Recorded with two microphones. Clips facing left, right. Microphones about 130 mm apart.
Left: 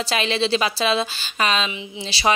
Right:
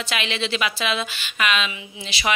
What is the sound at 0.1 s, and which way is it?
A woman's voice, 35° left (ahead or behind).